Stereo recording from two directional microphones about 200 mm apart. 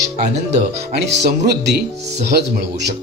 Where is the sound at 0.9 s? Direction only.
55° right (ahead or behind).